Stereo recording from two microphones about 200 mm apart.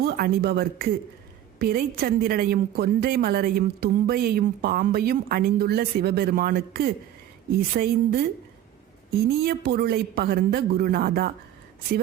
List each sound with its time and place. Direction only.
0.0 s a woman's voice: 50° right (ahead or behind)
9.3 s a woman's voice: 50° right (ahead or behind)